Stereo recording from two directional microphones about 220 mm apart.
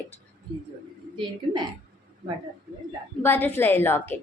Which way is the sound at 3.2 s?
10° left (ahead or behind).